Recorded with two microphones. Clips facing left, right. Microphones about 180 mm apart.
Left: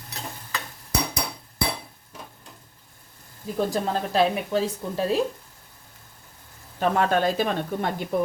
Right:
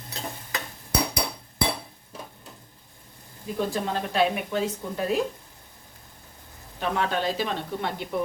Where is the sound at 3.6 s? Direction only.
35° left (ahead or behind).